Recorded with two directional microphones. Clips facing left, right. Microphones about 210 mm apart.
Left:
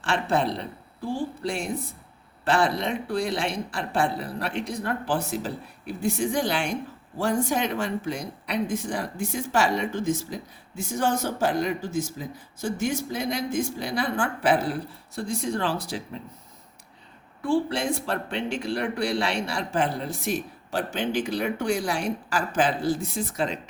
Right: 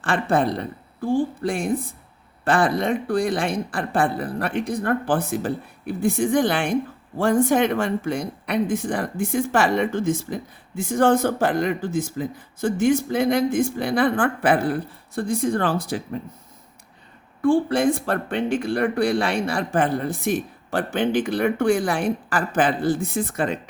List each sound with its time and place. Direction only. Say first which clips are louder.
0.0 s speech: right 4 dB; 50° right (ahead or behind)
17.4 s speech: right 6 dB; 50° right (ahead or behind)